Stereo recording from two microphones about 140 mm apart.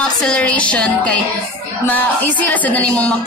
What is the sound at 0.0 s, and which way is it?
Speech, 5° left (ahead or behind).